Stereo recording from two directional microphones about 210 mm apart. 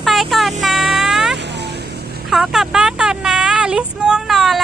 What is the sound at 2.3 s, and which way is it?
Child singing, centre (ahead or behind).